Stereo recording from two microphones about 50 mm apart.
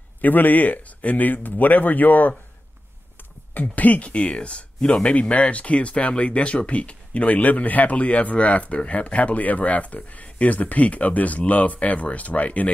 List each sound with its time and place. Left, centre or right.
0.2 s speech: left
3.5 s speech: left